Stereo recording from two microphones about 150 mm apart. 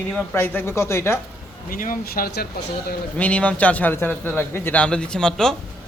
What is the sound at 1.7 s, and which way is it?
Speech, 70° left (ahead or behind).